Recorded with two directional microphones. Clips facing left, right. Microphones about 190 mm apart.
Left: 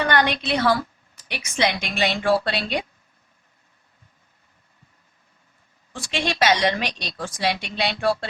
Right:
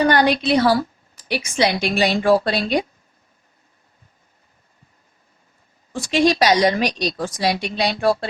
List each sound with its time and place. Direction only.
0.0 s a woman's voice: 35° right (ahead or behind)
5.9 s a woman's voice: 40° right (ahead or behind)